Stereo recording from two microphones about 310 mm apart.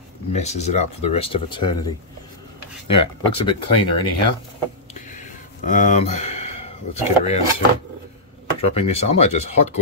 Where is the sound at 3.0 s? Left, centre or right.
Centre.